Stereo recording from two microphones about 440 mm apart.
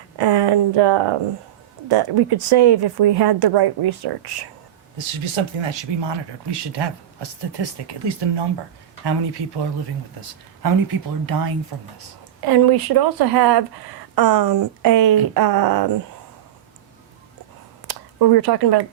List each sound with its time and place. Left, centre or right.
0.2 s speech: right
4.9 s speech: right
10.2 s speech: right
17.8 s speech: right